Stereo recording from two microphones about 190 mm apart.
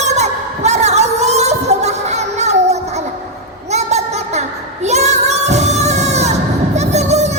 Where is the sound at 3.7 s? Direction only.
35° right (ahead or behind).